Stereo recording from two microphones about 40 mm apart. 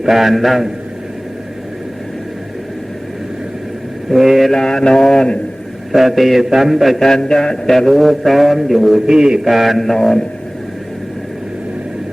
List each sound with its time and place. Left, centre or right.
0.0 s mantra: centre
4.1 s mantra: centre
4.5 s mantra: centre
5.9 s mantra: centre
7.0 s mantra: centre
9.1 s a man's voice: centre
9.4 s mantra: centre